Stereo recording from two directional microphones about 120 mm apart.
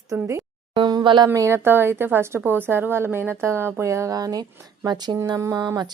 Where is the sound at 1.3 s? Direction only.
25° right (ahead or behind).